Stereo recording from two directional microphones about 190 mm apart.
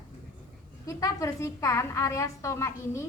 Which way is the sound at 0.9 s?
15° left (ahead or behind).